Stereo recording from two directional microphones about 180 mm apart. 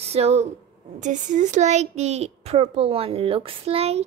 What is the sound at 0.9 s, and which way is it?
A child's voice, 45° right (ahead or behind).